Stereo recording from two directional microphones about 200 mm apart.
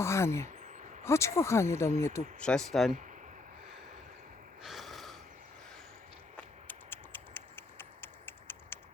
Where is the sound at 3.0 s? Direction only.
40° right (ahead or behind).